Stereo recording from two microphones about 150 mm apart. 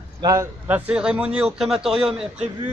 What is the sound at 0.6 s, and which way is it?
A man's voice, 10° right (ahead or behind).